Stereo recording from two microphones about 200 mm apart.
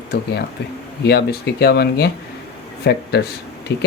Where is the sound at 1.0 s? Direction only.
55° left (ahead or behind).